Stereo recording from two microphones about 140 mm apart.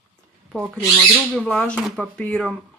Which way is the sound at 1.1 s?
10° left (ahead or behind).